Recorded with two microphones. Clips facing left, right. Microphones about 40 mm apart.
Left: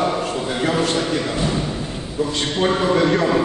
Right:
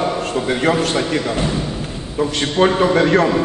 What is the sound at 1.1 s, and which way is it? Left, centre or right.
Speech, right.